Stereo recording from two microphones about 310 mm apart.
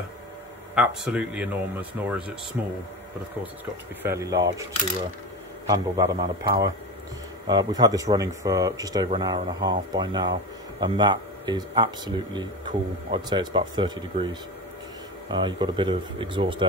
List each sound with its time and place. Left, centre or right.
0.7 s speech: centre
4.0 s speech: centre
5.7 s speech: centre